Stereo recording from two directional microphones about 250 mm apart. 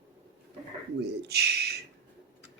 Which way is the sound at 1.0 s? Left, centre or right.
Right.